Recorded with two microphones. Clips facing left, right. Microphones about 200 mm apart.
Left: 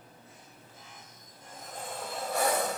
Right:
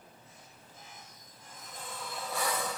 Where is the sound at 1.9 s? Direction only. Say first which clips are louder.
Left 6 dB; 45° left (ahead or behind).